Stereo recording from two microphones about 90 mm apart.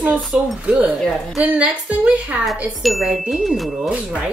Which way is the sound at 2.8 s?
Centre (ahead or behind).